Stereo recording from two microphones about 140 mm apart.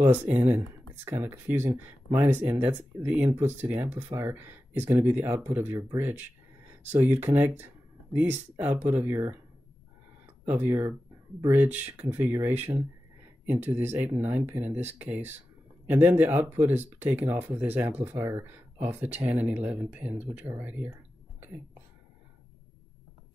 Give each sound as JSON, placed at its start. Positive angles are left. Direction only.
{"t": 0.0, "sound": "speech", "side_deg": -15}
{"t": 21.4, "sound": "whispering", "side_deg": -15}